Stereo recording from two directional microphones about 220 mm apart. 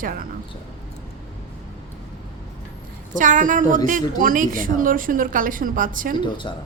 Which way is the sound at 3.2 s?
35° right (ahead or behind).